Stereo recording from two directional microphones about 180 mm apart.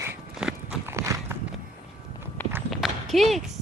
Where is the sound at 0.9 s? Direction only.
15° right (ahead or behind).